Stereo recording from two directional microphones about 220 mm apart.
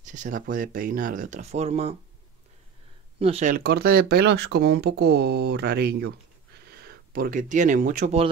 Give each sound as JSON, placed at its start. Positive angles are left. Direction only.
{"t": 0.0, "sound": "speech", "side_deg": -35}
{"t": 3.2, "sound": "speech", "side_deg": -30}